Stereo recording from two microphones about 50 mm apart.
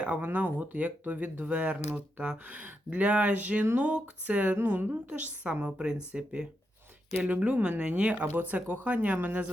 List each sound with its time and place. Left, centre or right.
0.0 s speech: right
8.3 s speech: right